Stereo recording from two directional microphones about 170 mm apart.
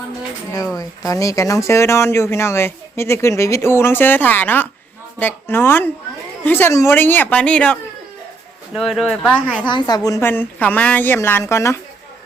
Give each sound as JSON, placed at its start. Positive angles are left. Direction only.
{"t": 0.8, "sound": "speech", "side_deg": 20}
{"t": 9.6, "sound": "speech", "side_deg": 25}